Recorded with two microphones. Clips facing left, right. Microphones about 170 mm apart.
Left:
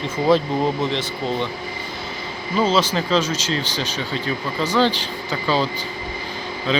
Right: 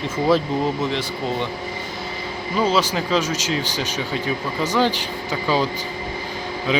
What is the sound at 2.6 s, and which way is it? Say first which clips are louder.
Speech: left 1 dB; 10° right (ahead or behind).